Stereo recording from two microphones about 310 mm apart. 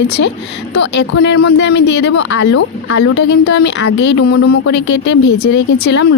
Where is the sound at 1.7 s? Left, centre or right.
Left.